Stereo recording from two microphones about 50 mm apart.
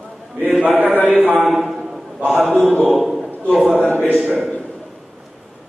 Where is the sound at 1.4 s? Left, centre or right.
Centre.